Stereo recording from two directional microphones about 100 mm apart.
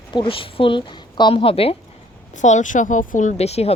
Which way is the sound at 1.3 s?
70° left (ahead or behind).